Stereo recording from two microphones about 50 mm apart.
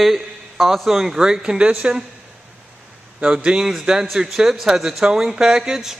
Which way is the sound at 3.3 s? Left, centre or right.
Centre.